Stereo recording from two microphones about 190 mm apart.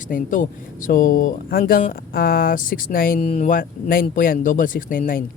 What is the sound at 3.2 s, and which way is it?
Speech, 35° left (ahead or behind).